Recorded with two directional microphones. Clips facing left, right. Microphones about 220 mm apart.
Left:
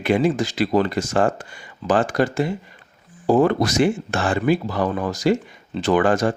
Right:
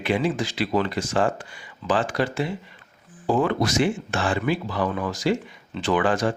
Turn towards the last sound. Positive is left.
turn(degrees=45)  # may be behind; listen again after turning